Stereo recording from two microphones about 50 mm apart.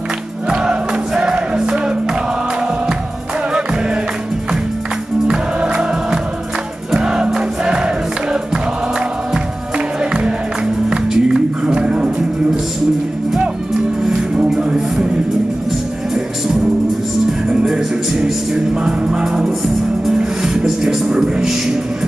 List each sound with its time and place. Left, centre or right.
0.5 s music: centre
5.3 s music: centre
10.9 s music: centre
14.0 s music: centre
17.5 s music: centre